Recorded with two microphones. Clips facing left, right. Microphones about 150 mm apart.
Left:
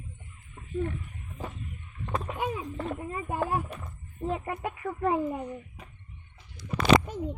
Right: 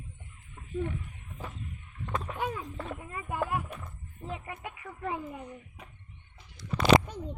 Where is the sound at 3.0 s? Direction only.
30° left (ahead or behind).